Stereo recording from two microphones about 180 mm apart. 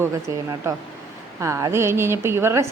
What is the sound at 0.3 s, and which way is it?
Speech, 15° right (ahead or behind).